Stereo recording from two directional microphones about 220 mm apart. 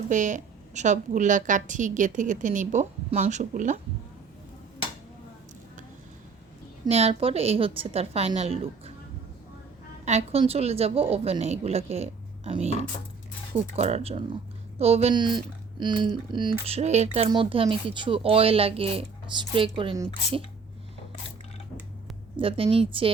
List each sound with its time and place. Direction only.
0.1 s a woman's voice: 35° right (ahead or behind)
6.8 s speech: 30° right (ahead or behind)
10.1 s speech: 30° right (ahead or behind)
13.7 s speech: 30° right (ahead or behind)
22.4 s speech: 25° right (ahead or behind)